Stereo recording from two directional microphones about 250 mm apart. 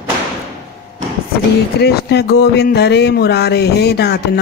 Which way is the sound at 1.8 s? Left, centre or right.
Left.